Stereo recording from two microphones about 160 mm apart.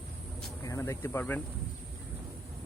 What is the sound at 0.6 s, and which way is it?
Speech, 20° left (ahead or behind).